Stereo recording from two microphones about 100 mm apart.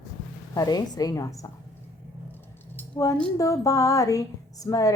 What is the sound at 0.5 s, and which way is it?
Speech, 35° left (ahead or behind).